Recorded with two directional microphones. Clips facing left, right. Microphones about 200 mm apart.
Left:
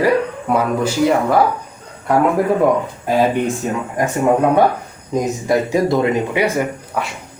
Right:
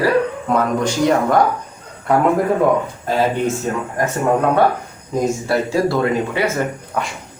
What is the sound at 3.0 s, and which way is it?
Speech, 15° left (ahead or behind).